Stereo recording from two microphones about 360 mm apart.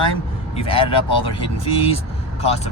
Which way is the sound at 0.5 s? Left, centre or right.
Centre.